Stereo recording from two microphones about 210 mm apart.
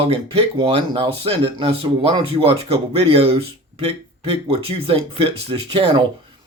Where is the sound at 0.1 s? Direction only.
25° right (ahead or behind).